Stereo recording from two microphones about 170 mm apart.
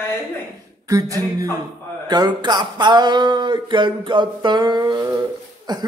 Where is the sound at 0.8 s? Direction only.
20° right (ahead or behind).